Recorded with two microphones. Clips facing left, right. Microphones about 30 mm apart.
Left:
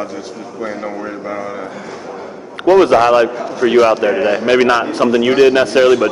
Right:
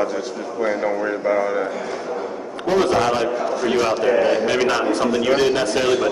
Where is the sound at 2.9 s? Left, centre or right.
Left.